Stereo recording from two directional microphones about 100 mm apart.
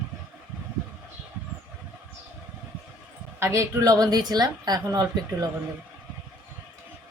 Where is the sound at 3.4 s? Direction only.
30° right (ahead or behind).